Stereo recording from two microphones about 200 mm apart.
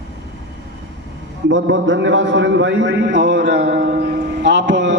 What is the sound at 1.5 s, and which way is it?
A man's voice, 65° right (ahead or behind).